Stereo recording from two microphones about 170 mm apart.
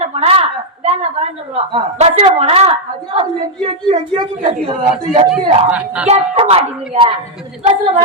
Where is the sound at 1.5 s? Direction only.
35° right (ahead or behind).